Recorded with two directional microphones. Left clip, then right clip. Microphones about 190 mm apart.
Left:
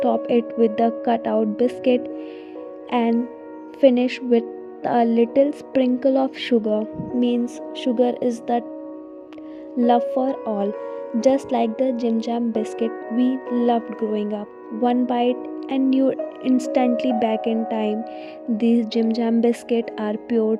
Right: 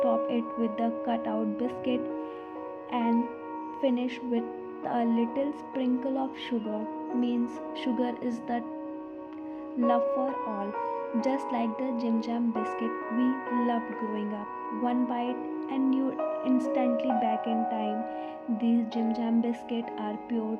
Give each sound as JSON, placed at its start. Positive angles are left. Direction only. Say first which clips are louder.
{"t": 0.0, "sound": "speech", "louder": "left 7 dB", "side_deg": 50}
{"t": 9.7, "sound": "speech", "louder": "left 7 dB", "side_deg": 45}